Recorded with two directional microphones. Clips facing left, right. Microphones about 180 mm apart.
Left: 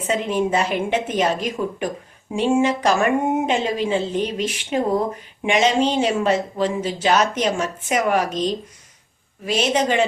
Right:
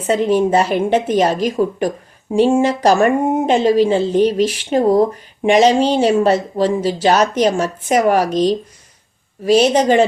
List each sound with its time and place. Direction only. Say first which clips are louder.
0.1 s speech: right 7 dB; 35° right (ahead or behind)